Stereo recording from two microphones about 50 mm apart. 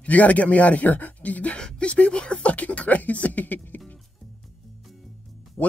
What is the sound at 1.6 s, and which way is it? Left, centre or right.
Speech, centre.